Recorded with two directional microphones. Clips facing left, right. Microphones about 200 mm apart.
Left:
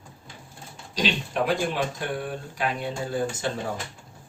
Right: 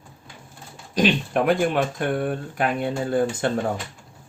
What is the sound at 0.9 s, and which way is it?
Speech, 55° right (ahead or behind).